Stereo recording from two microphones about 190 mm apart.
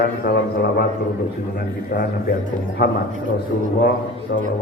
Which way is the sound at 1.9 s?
55° left (ahead or behind).